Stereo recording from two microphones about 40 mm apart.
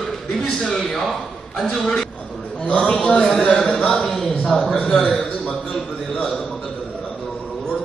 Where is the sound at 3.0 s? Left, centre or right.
Centre.